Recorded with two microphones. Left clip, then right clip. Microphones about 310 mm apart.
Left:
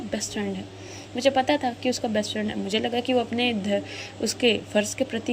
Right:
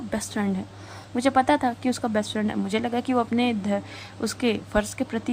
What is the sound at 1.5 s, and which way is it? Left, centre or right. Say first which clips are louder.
Speech: right 1 dB; centre.